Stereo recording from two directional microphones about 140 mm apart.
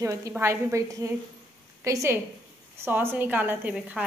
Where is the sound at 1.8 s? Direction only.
20° right (ahead or behind).